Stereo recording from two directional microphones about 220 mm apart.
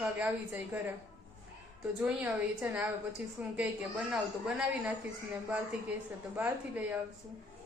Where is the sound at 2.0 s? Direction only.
5° right (ahead or behind).